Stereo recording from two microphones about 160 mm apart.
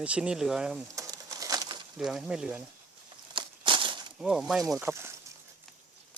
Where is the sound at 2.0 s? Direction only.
5° right (ahead or behind).